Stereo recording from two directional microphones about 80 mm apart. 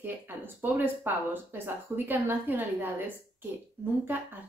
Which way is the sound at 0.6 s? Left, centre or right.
Right.